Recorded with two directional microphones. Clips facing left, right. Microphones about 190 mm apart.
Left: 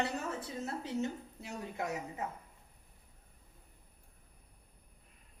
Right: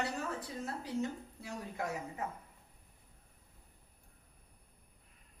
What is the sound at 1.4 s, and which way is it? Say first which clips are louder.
Speech: left 1 dB; 20° left (ahead or behind).